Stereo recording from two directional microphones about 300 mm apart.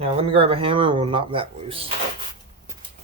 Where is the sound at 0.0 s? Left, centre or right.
Centre.